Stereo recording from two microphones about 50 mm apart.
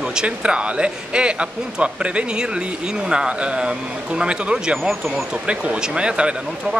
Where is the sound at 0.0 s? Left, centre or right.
Centre.